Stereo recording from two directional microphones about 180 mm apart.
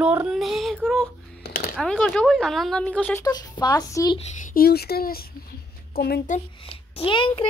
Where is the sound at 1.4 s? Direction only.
55° left (ahead or behind).